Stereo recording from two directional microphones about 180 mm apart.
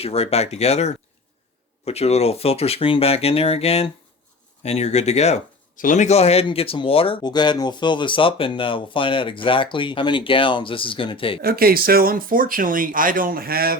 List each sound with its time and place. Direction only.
0.0 s speech: 35° left (ahead or behind)
11.4 s speech: 55° right (ahead or behind)